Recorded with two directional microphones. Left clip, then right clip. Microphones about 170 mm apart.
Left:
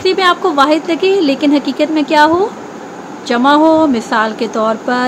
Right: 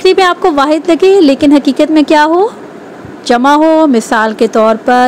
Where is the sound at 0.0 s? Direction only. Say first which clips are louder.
Right 4 dB; 40° right (ahead or behind).